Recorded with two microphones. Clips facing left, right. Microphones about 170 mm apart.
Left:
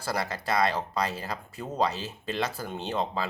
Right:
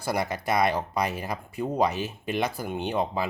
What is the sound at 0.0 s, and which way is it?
Speech, 15° right (ahead or behind).